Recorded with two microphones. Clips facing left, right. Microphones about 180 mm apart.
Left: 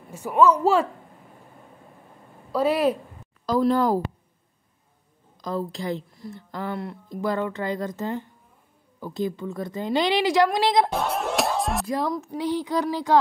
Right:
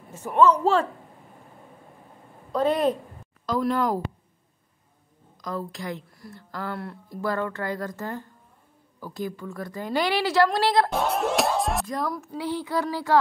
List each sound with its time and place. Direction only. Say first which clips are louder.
0.1 s speech: left 1 dB; 10° left (ahead or behind)
2.5 s speech: left 1 dB; 5° left (ahead or behind)
3.4 s a woman's voice: left 4 dB; 35° left (ahead or behind)
5.4 s speech: left 4 dB; 25° left (ahead or behind)
10.9 s speech: right 1 dB; centre (ahead or behind)
11.9 s speech: left 3 dB; 25° left (ahead or behind)